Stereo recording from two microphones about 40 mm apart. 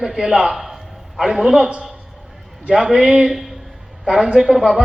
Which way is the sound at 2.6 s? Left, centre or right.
Right.